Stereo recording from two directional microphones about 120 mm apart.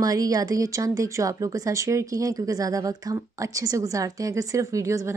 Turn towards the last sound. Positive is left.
turn(degrees=-25)  # may be behind; listen again after turning